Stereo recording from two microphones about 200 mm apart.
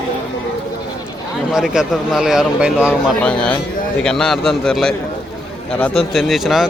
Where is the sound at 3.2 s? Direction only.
5° left (ahead or behind).